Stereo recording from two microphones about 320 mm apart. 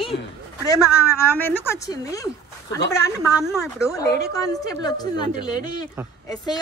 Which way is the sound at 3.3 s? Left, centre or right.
Centre.